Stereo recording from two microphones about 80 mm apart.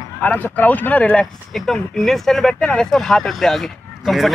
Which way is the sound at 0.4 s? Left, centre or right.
Left.